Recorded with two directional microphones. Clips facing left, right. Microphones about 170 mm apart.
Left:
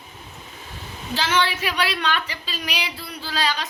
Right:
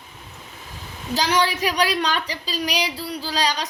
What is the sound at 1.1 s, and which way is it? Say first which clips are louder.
A woman's voice: right 2 dB; 40° right (ahead or behind).